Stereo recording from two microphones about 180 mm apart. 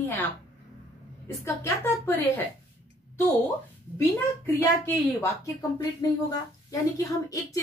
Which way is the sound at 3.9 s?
15° left (ahead or behind).